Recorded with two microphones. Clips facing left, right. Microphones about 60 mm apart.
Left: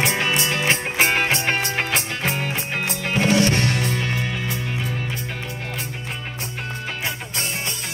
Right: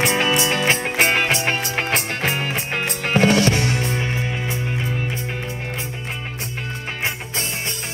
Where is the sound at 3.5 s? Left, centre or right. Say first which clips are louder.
Even; left.